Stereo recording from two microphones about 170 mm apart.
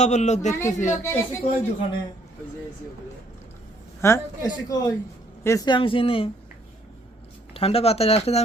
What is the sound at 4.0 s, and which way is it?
A man's voice, 20° left (ahead or behind).